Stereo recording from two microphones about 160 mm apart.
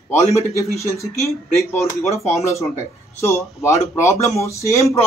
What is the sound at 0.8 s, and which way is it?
Speech, 20° left (ahead or behind).